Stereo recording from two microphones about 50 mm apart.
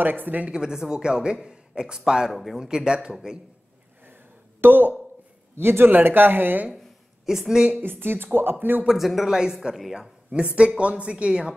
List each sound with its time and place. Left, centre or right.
0.0 s speech: right
0.5 s a man's voice: centre
2.6 s a man's voice: centre
4.6 s speech: right
5.6 s speech: right
7.2 s a man's voice: centre
7.8 s speech: right
8.8 s a man's voice: centre
10.3 s a woman's voice: right